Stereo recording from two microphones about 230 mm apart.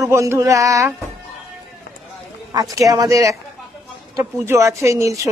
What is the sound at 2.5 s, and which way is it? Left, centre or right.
Speech, centre.